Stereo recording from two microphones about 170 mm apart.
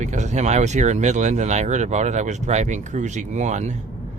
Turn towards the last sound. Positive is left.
turn(degrees=-45)  # may be behind; listen again after turning